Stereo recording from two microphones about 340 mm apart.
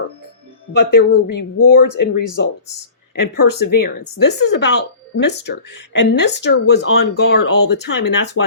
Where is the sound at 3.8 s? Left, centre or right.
Left.